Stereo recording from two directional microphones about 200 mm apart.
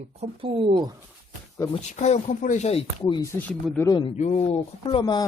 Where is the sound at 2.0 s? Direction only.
35° left (ahead or behind).